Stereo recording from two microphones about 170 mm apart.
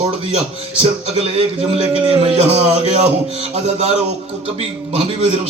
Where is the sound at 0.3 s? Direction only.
35° right (ahead or behind).